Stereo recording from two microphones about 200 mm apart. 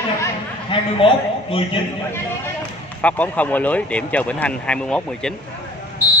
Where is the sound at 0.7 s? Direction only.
25° left (ahead or behind).